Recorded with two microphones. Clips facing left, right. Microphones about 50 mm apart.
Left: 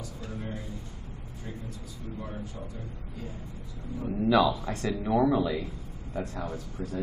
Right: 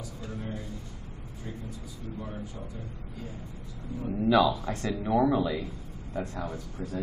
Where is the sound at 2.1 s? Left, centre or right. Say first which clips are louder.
Even; centre.